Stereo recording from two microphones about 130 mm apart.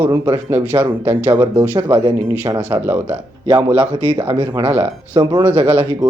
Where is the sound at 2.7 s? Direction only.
15° right (ahead or behind).